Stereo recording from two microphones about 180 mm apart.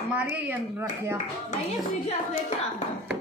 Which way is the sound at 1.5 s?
40° left (ahead or behind).